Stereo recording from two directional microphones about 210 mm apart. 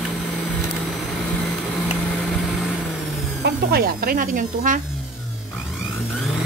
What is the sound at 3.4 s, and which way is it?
Speech, 50° right (ahead or behind).